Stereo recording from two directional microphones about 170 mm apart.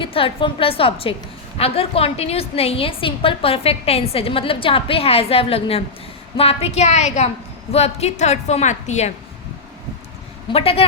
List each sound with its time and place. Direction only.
0.0 s a woman's voice: 30° left (ahead or behind)
10.5 s a woman's voice: 35° left (ahead or behind)